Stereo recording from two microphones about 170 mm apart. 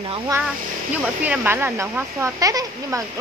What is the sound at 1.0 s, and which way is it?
Speech, 10° right (ahead or behind).